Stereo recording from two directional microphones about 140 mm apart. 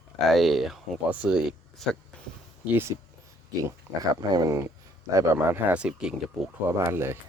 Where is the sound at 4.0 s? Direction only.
25° right (ahead or behind).